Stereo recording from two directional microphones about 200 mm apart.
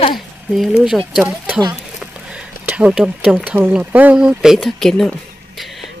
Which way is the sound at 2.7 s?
5° right (ahead or behind).